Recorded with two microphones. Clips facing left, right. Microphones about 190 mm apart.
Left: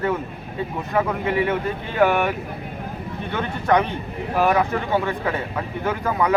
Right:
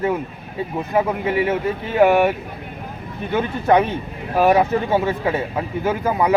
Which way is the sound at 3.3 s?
20° right (ahead or behind).